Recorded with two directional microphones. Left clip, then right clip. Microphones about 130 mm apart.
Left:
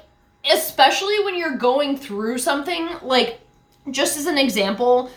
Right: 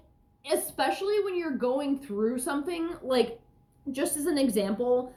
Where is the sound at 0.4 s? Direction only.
20° left (ahead or behind).